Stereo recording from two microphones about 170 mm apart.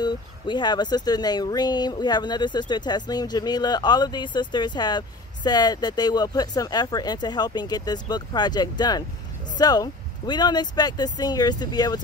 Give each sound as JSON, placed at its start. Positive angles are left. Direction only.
{"t": 0.0, "sound": "speech", "side_deg": 25}